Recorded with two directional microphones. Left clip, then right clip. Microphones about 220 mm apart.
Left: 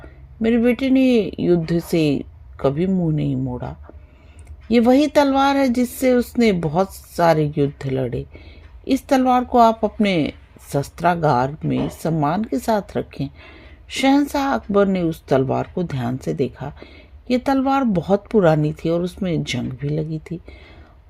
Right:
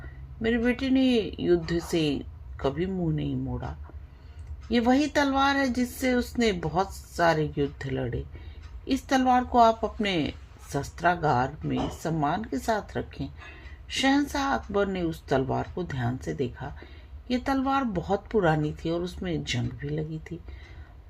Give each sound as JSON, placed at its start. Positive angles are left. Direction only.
{"t": 0.4, "sound": "speech", "side_deg": 40}
{"t": 4.7, "sound": "speech", "side_deg": 40}